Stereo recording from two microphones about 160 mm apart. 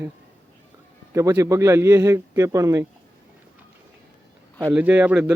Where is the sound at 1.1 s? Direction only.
20° right (ahead or behind).